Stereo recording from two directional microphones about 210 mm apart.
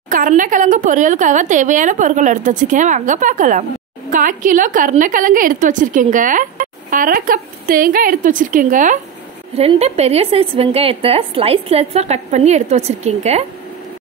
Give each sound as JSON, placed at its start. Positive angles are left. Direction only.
{"t": 0.1, "sound": "a woman's voice", "side_deg": -40}